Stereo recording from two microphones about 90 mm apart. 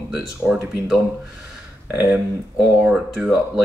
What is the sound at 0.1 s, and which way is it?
Speech, 10° right (ahead or behind).